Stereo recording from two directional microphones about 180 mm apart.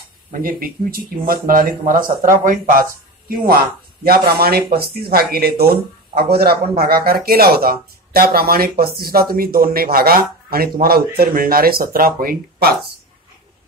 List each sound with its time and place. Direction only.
0.3 s speech: 50° right (ahead or behind)